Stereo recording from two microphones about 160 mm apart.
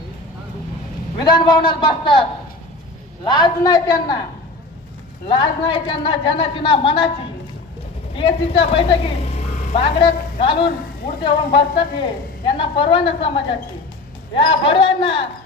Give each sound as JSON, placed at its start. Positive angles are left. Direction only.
{"t": 1.2, "sound": "a woman's voice", "side_deg": 30}
{"t": 3.2, "sound": "a woman's voice", "side_deg": 25}
{"t": 5.3, "sound": "a woman's voice", "side_deg": 30}
{"t": 8.1, "sound": "a woman's voice", "side_deg": 35}